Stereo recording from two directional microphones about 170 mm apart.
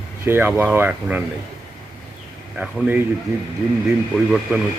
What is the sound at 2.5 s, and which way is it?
Speech, 5° right (ahead or behind).